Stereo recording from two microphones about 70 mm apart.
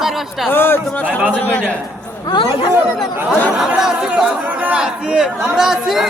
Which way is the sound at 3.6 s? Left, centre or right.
Centre.